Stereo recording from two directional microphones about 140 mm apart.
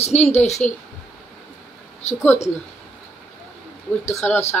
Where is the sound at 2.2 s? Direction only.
15° left (ahead or behind).